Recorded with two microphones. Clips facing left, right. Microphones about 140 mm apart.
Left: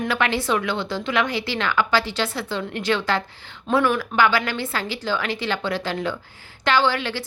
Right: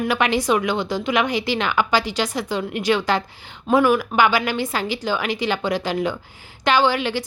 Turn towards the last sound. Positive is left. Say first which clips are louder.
# right 2 dB
turn(degrees=-15)  # may be behind; listen again after turning